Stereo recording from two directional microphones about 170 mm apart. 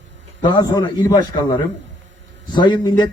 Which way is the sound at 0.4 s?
25° left (ahead or behind).